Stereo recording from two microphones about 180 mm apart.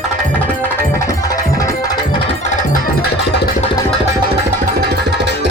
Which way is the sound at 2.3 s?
45° left (ahead or behind).